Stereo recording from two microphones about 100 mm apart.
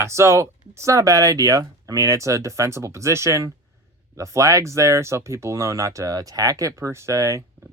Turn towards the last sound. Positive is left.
turn(degrees=-30)  # may be behind; listen again after turning